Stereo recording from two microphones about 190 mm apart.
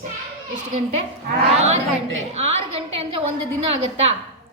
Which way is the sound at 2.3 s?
30° right (ahead or behind).